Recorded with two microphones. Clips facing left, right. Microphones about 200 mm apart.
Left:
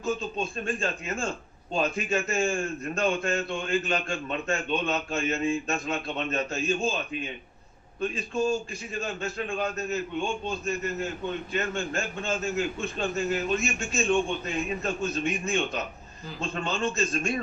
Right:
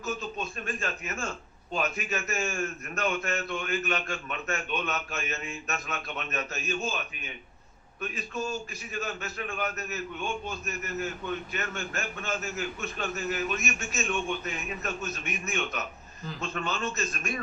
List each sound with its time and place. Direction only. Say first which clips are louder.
0.0 s a man's voice: left 5 dB; 30° left (ahead or behind)
8.0 s a man's voice: left 7 dB; 30° left (ahead or behind)